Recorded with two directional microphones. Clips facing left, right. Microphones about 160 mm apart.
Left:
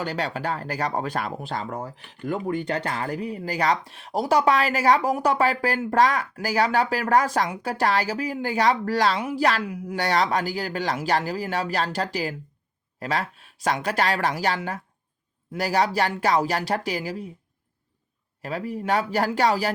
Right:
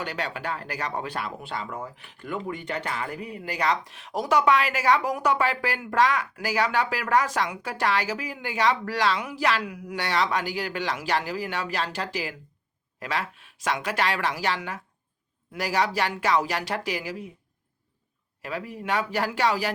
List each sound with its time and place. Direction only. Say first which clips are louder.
0.0 s speech: left 4 dB; 35° left (ahead or behind)
18.4 s speech: left 4 dB; 40° left (ahead or behind)